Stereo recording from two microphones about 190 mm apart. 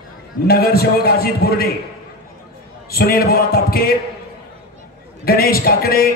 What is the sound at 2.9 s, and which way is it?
A man's voice, 50° left (ahead or behind).